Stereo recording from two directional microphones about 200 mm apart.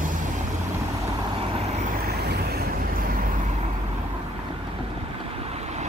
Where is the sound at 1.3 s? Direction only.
30° right (ahead or behind).